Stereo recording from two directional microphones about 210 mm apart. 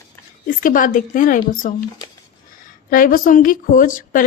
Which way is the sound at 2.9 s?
40° left (ahead or behind).